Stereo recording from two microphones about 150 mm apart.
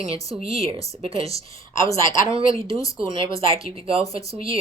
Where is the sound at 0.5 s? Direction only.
40° right (ahead or behind).